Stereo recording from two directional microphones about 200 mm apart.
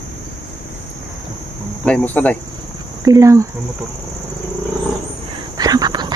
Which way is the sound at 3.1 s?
15° right (ahead or behind).